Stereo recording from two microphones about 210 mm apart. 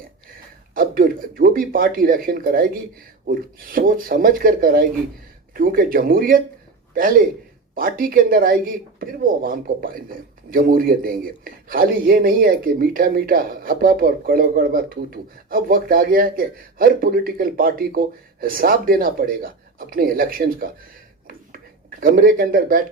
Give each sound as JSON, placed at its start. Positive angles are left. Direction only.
{"t": 0.7, "sound": "speech", "side_deg": -40}
{"t": 7.8, "sound": "speech", "side_deg": -45}
{"t": 21.2, "sound": "a sound", "side_deg": -45}